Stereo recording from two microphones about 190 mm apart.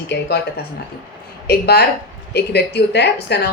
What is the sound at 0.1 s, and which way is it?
Speech, 60° left (ahead or behind).